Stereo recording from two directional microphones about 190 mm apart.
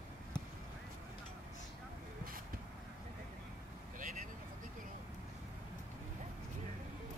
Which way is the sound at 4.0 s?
45° right (ahead or behind).